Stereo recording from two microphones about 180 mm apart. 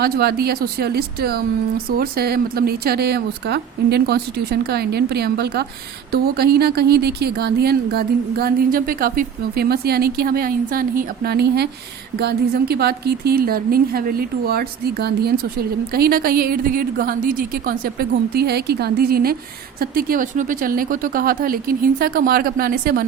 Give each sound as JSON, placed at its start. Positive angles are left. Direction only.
{"t": 0.0, "sound": "speech", "side_deg": -60}